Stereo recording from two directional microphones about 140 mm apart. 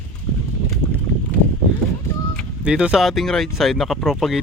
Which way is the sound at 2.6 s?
5° right (ahead or behind).